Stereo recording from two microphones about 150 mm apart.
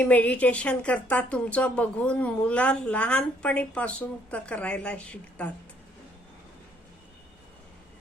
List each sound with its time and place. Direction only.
0.0 s a woman's voice: 10° left (ahead or behind)